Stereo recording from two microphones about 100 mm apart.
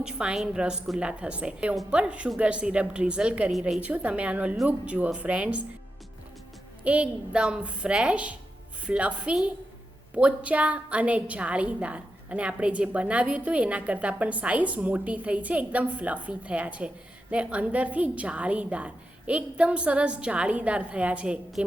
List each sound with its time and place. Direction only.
0.0 s a woman's voice: 10° right (ahead or behind)
6.8 s a woman's voice: 10° right (ahead or behind)